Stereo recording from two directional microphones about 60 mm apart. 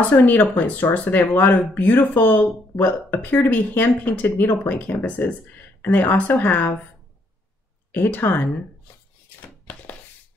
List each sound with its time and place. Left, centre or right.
0.1 s a woman's voice: left
7.9 s speech: left